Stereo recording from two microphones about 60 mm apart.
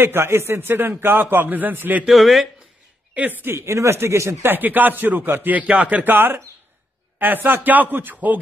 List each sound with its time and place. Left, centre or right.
0.0 s a man's voice: right
2.0 s speech: centre
3.4 s speech: right
4.4 s a man's voice: right
6.1 s a man's voice: right
7.4 s speech: right